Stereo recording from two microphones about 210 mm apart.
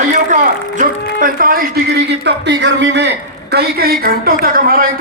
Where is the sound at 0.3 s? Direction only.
35° right (ahead or behind).